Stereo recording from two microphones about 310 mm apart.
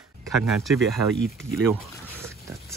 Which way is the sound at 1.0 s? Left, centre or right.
Right.